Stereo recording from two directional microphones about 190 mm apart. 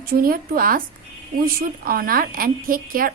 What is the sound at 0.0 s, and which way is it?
A woman's voice, 50° right (ahead or behind).